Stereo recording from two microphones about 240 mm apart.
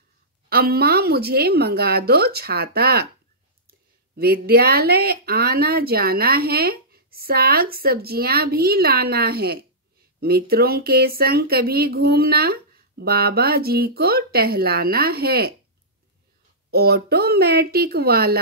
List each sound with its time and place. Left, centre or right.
0.5 s speech: right
4.2 s speech: right
16.7 s speech: right